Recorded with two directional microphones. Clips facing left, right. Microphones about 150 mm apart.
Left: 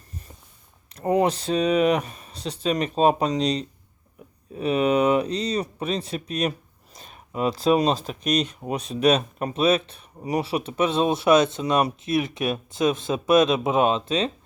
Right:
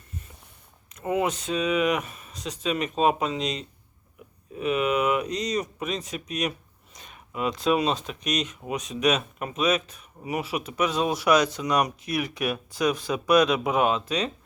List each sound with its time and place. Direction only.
0.9 s speech: 35° left (ahead or behind)